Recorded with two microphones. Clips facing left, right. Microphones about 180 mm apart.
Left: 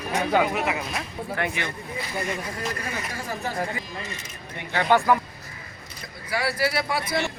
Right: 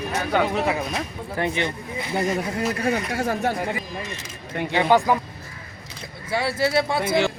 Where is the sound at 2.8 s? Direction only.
75° right (ahead or behind).